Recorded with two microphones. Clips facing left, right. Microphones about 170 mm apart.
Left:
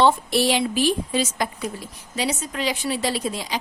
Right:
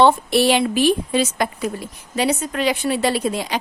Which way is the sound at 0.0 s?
60° right (ahead or behind).